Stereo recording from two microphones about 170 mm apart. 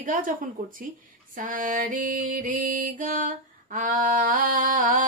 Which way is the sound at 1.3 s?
50° right (ahead or behind).